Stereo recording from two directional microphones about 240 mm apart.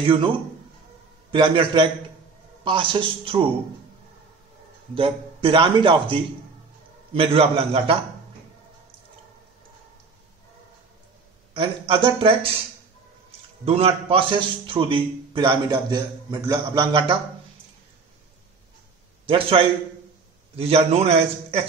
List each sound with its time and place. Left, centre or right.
0.0 s a man's voice: right
1.3 s a man's voice: centre
4.9 s a man's voice: right
11.5 s a man's voice: right
13.7 s a man's voice: right
19.2 s a man's voice: right